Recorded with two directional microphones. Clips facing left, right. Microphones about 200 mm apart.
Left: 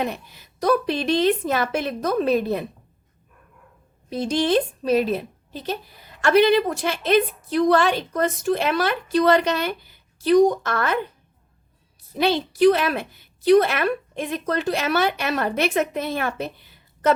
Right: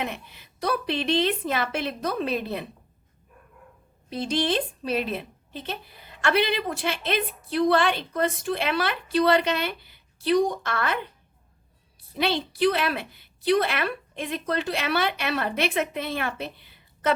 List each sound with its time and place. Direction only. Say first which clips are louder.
0.0 s a woman's voice: left 5 dB; 40° left (ahead or behind)
4.1 s a woman's voice: left 5 dB; 45° left (ahead or behind)
12.1 s a woman's voice: left 5 dB; 45° left (ahead or behind)